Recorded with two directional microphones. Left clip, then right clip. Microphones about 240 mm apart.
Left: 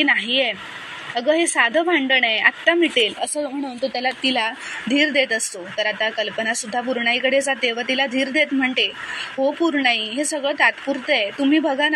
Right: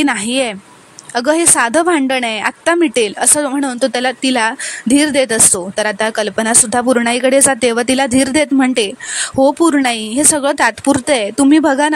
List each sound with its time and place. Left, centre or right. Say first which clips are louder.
0.0 s a woman's voice: right 2 dB; right